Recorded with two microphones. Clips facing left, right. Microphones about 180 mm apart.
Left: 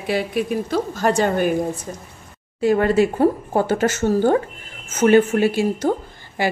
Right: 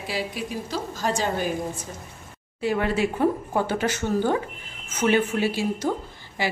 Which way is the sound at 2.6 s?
45° left (ahead or behind).